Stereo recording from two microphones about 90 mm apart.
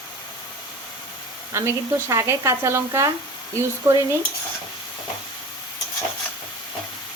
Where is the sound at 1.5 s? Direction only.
35° right (ahead or behind).